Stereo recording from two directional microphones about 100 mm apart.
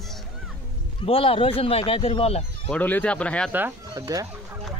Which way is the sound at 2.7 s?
15° left (ahead or behind).